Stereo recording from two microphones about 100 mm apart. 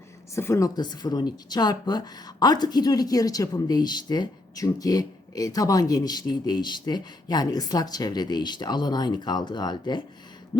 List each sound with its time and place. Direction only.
0.3 s a woman's voice: 30° left (ahead or behind)
0.8 s speech: 45° left (ahead or behind)
10.5 s a sound: 40° left (ahead or behind)